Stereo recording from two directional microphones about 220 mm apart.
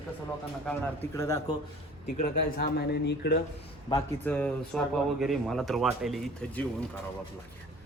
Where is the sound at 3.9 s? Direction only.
5° left (ahead or behind).